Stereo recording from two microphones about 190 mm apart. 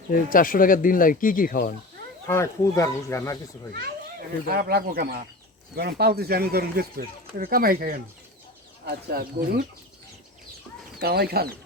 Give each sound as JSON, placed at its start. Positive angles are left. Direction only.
{"t": 0.1, "sound": "speech", "side_deg": 45}
{"t": 2.2, "sound": "speech", "side_deg": 15}
{"t": 3.7, "sound": "speech", "side_deg": -55}
{"t": 11.0, "sound": "speech", "side_deg": -55}